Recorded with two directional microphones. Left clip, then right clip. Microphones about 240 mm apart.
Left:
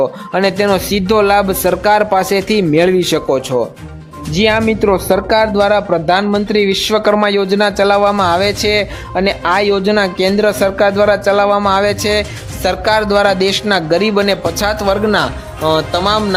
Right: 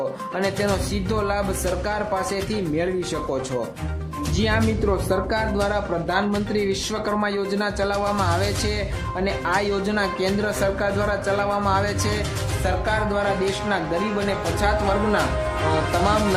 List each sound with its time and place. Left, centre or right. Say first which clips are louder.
0.3 s speech: left 12 dB; left
4.4 s speech: left 11 dB; left